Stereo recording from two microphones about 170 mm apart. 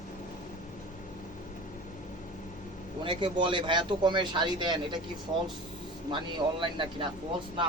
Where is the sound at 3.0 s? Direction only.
30° right (ahead or behind).